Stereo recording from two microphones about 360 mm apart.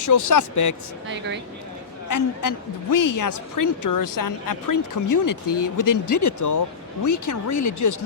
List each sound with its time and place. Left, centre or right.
0.0 s speech: left
1.0 s speech: right
2.0 s a woman's voice: left